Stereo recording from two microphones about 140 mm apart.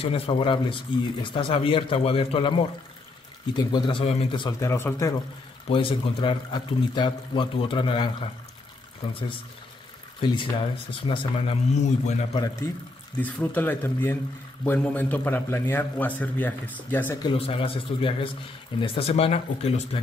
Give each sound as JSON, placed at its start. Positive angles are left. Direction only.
{"t": 0.0, "sound": "speech", "side_deg": 40}
{"t": 3.5, "sound": "speech", "side_deg": 35}
{"t": 5.7, "sound": "speech", "side_deg": 40}
{"t": 10.2, "sound": "speech", "side_deg": 35}
{"t": 11.7, "sound": "a man's voice", "side_deg": 50}
{"t": 13.2, "sound": "a man's voice", "side_deg": 10}
{"t": 17.2, "sound": "speech", "side_deg": 40}